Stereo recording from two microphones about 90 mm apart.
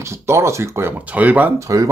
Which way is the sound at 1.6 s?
35° right (ahead or behind).